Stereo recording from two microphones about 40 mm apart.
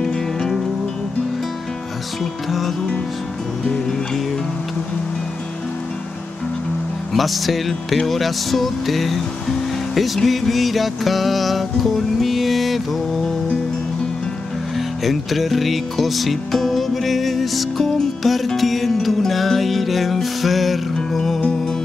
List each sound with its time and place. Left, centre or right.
0.0 s music: centre
3.6 s music: centre
7.2 s music: centre
15.0 s music: centre